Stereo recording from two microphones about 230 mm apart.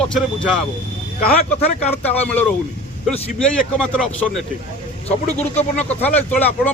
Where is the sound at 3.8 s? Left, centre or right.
Centre.